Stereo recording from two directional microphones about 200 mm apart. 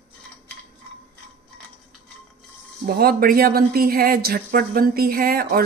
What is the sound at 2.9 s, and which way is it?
Speech, 50° right (ahead or behind).